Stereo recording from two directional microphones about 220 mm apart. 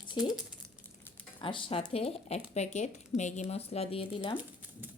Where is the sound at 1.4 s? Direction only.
25° left (ahead or behind).